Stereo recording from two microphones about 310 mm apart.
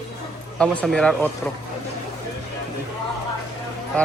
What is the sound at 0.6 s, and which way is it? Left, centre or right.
Speech, centre.